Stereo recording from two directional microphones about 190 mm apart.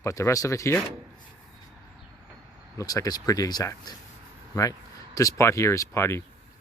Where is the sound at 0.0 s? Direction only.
15° left (ahead or behind).